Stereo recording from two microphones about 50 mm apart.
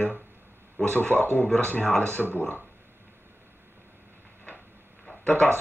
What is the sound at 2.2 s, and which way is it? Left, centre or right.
Speech, centre.